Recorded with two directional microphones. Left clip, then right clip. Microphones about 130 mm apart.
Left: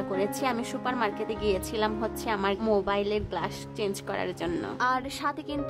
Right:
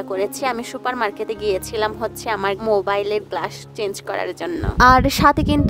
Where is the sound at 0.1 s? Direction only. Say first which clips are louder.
Right 8 dB; 55° right (ahead or behind).